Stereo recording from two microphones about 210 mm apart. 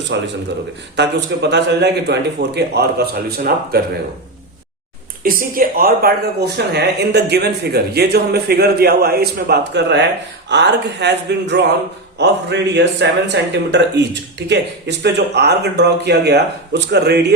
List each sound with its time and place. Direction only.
0.1 s speech: 55° right (ahead or behind)
5.2 s speech: 40° right (ahead or behind)